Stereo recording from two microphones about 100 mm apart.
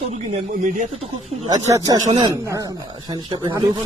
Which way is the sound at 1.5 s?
35° right (ahead or behind).